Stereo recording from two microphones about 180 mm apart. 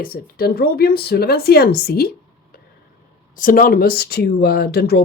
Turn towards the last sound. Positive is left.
turn(degrees=60)  # may be behind; listen again after turning